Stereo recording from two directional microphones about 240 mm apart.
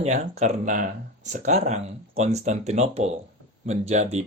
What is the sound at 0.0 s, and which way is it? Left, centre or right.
Speech, right.